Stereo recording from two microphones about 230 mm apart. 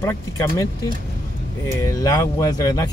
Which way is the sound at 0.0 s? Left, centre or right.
Centre.